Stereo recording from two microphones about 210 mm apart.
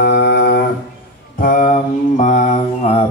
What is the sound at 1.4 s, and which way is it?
Mantra, 40° left (ahead or behind).